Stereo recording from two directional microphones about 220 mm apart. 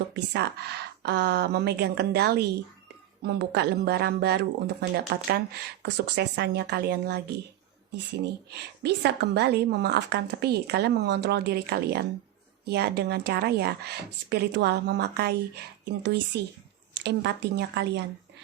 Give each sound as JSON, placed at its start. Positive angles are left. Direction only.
{"t": 0.3, "sound": "a woman's voice", "side_deg": -50}
{"t": 8.4, "sound": "a woman's voice", "side_deg": -50}